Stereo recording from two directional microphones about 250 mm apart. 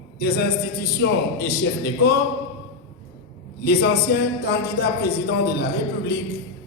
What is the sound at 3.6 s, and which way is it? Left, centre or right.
A man's voice, left.